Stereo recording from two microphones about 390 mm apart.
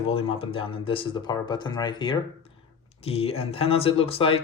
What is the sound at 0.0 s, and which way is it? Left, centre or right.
Speech, centre.